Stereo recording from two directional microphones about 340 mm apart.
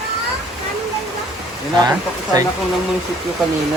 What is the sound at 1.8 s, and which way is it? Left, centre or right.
Speech, centre.